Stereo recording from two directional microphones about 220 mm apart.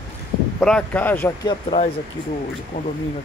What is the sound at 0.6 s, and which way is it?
Speech, 5° left (ahead or behind).